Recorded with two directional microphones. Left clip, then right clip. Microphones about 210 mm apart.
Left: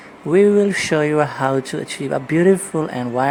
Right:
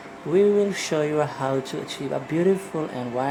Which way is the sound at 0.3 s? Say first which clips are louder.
Left 5 dB; 35° left (ahead or behind).